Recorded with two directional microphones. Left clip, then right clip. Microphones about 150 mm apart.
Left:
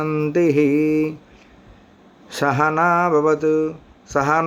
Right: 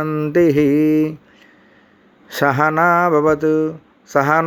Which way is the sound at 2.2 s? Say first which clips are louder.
Right 3 dB; 30° right (ahead or behind).